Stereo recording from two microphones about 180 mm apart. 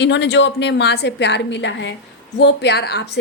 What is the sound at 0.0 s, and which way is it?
A woman's voice, 75° left (ahead or behind).